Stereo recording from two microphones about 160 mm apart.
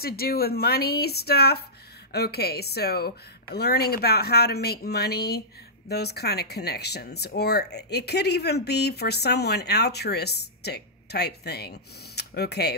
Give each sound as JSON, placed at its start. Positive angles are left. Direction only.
{"t": 0.0, "sound": "a woman's voice", "side_deg": 75}